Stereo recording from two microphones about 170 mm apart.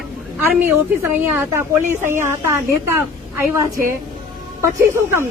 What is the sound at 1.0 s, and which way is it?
A woman's voice, 15° right (ahead or behind).